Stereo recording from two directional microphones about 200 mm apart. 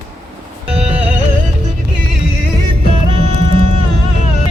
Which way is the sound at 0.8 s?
35° right (ahead or behind).